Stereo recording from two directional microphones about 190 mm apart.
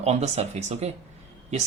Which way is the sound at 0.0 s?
35° right (ahead or behind).